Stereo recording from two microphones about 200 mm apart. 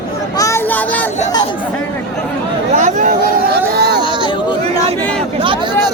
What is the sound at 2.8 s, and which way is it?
Chatter, 40° right (ahead or behind).